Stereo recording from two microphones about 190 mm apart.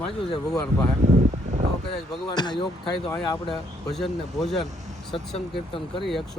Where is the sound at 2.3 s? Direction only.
20° left (ahead or behind).